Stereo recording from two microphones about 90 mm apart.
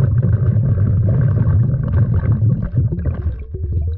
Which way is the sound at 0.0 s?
5° right (ahead or behind).